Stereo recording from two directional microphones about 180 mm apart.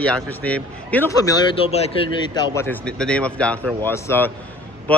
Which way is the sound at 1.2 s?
20° left (ahead or behind).